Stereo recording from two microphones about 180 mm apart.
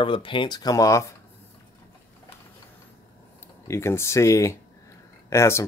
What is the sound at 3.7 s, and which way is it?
Speech, 15° left (ahead or behind).